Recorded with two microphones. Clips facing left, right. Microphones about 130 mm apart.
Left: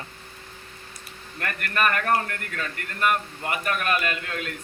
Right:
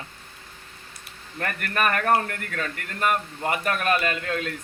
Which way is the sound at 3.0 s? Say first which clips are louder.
Even; 35° right (ahead or behind).